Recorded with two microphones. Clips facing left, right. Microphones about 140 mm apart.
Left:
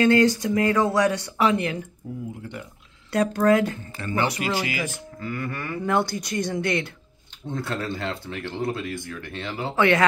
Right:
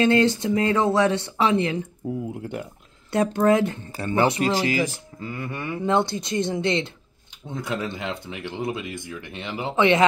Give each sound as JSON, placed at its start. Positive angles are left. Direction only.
{"t": 0.0, "sound": "speech", "side_deg": -25}
{"t": 3.1, "sound": "speech", "side_deg": -25}